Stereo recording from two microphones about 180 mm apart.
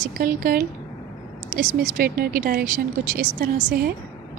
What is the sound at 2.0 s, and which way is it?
A woman's voice, 55° right (ahead or behind).